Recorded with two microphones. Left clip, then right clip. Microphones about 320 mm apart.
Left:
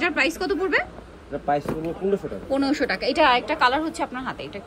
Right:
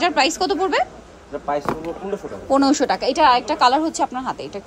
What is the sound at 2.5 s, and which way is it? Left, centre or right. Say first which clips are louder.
A woman's voice: right 6 dB; centre.